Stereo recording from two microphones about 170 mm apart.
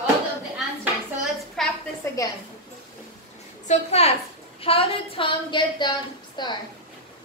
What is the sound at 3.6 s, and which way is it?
A woman's voice, 40° left (ahead or behind).